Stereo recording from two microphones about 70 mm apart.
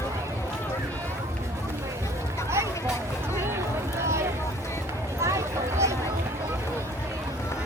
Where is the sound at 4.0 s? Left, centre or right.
Right.